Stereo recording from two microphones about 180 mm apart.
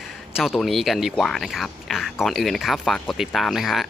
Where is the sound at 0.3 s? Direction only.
Centre (ahead or behind).